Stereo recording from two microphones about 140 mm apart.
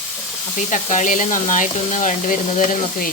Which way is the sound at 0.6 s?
60° left (ahead or behind).